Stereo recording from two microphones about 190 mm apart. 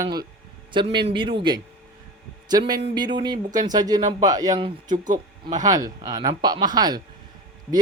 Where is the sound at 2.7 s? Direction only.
25° right (ahead or behind).